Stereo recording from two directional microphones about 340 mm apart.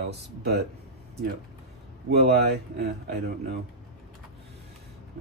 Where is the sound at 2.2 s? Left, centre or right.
Right.